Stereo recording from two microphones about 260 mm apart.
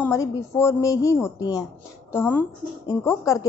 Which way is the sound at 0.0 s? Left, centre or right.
Centre.